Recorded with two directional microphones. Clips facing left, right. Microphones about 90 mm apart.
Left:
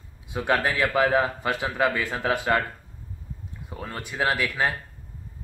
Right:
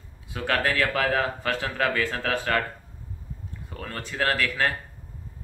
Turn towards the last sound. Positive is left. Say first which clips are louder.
# even
turn(degrees=15)  # may be behind; listen again after turning